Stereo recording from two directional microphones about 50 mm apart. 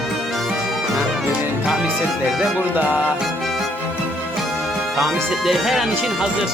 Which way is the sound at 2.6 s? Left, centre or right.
Right.